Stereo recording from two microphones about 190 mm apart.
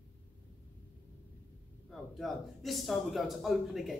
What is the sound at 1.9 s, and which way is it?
A man's voice, centre (ahead or behind).